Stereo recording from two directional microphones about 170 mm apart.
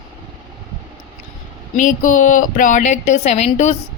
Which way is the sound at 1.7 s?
50° left (ahead or behind).